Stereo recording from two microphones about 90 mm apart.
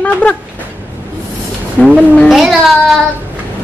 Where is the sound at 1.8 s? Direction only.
15° left (ahead or behind).